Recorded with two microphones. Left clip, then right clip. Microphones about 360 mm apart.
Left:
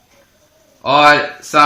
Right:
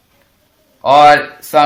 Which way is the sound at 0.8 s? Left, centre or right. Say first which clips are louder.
Right 3 dB; centre.